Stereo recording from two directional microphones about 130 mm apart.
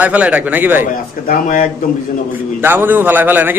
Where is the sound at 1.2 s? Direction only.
90° left.